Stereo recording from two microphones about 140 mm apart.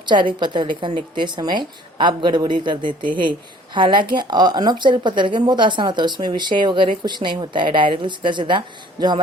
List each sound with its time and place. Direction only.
0.0 s a woman's voice: 35° right (ahead or behind)